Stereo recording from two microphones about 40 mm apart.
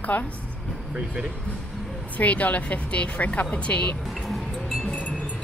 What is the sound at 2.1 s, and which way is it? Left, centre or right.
A woman's voice, left.